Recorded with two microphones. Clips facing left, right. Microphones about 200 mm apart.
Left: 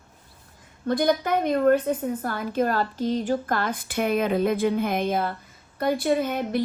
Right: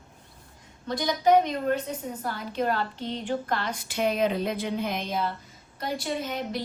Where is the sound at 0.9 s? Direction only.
55° left (ahead or behind).